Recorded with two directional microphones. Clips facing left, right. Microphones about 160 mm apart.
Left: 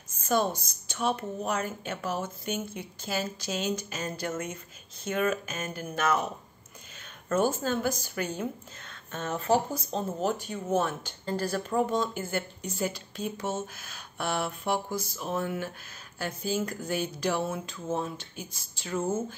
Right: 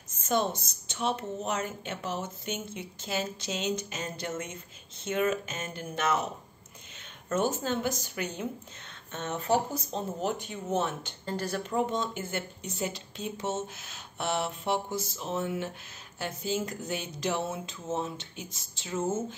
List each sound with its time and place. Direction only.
0.2 s speech: 25° right (ahead or behind)
7.2 s speech: 20° right (ahead or behind)